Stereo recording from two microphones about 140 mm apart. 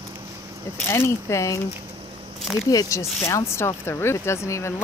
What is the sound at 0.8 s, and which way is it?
Speech, 20° left (ahead or behind).